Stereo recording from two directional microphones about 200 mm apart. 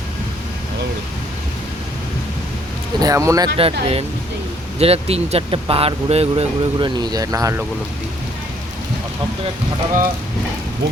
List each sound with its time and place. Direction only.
3.0 s speech: 15° right (ahead or behind)
3.6 s speech: 30° right (ahead or behind)